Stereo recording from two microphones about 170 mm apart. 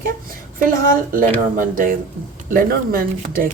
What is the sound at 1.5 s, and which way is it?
Speech, 55° right (ahead or behind).